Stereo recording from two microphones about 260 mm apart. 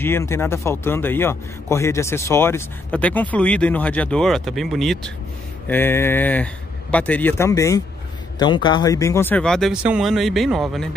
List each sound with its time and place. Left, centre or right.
0.0 s speech: centre